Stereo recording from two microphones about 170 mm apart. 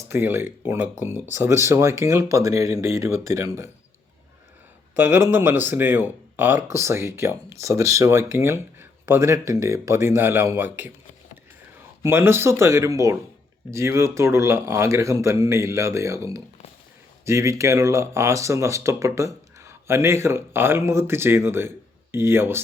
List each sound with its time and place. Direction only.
0.0 s speech: 15° right (ahead or behind)
4.9 s speech: 15° right (ahead or behind)
12.0 s speech: 15° right (ahead or behind)